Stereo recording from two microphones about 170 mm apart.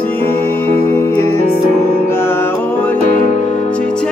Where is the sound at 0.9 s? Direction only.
15° left (ahead or behind).